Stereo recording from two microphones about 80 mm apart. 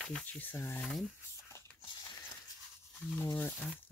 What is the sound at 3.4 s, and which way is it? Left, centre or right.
Speech, left.